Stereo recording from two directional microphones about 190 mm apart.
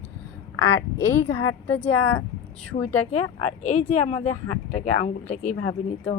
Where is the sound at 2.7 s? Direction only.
45° left (ahead or behind).